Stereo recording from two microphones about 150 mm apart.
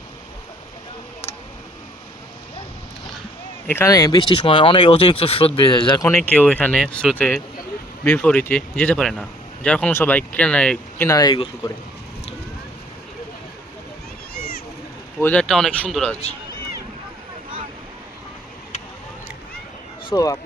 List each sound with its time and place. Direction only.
3.7 s speech: 20° left (ahead or behind)
4.2 s speech: 35° left (ahead or behind)
6.0 s speech: 15° left (ahead or behind)
15.2 s speech: 10° left (ahead or behind)
20.1 s speech: 25° left (ahead or behind)